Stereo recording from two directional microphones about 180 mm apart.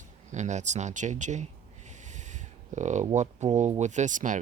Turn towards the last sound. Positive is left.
turn(degrees=-45)  # may be behind; listen again after turning